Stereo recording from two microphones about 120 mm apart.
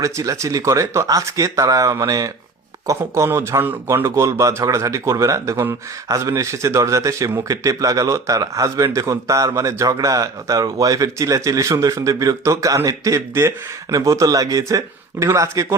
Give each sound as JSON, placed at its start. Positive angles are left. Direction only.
{"t": 0.0, "sound": "speech", "side_deg": -25}